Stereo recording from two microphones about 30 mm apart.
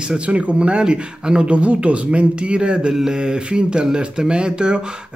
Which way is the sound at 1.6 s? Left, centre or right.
Right.